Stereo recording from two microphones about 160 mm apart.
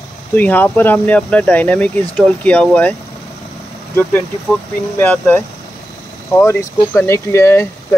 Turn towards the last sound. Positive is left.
turn(degrees=15)  # may be behind; listen again after turning